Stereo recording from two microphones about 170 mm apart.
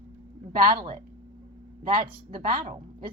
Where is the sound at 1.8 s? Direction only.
55° right (ahead or behind).